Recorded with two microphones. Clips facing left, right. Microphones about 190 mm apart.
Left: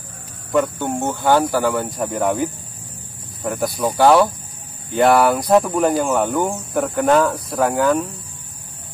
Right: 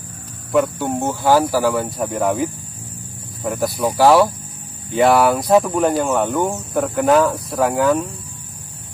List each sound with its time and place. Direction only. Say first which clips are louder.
0.5 s speech: right 1 dB; 5° right (ahead or behind)